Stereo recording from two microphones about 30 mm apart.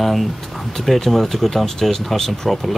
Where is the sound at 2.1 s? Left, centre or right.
Centre.